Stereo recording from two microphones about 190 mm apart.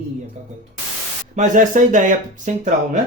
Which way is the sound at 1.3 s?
40° right (ahead or behind).